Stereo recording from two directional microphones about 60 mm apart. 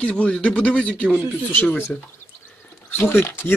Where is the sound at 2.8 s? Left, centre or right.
Left.